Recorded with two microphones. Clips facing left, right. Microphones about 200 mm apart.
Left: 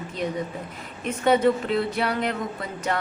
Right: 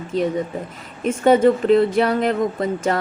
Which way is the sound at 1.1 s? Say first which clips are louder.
Right 6 dB; 50° right (ahead or behind).